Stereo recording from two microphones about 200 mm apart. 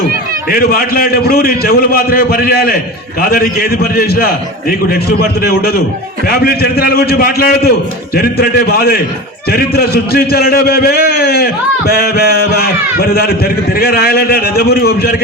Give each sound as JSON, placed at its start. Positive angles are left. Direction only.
{"t": 0.5, "sound": "a man's voice", "side_deg": 45}
{"t": 5.4, "sound": "a man's voice", "side_deg": 50}